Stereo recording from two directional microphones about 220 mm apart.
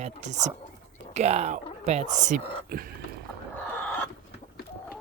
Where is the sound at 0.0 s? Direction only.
30° right (ahead or behind).